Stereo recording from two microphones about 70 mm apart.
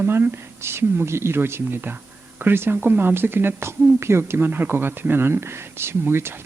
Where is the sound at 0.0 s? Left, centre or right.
Right.